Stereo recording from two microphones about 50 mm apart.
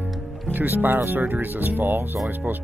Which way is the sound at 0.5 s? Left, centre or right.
Right.